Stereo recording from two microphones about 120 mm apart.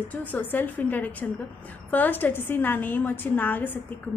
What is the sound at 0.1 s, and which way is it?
A woman's voice, 15° left (ahead or behind).